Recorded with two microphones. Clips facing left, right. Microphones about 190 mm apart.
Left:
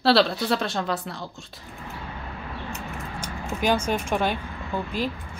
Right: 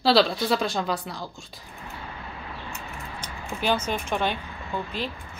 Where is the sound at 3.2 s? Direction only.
10° left (ahead or behind).